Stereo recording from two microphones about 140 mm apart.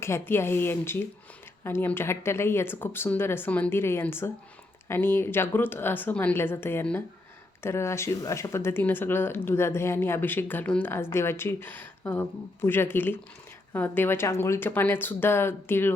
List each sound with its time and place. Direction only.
0.0 s speech: 20° left (ahead or behind)